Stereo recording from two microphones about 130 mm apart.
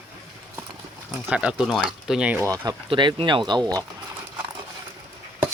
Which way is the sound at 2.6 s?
35° right (ahead or behind).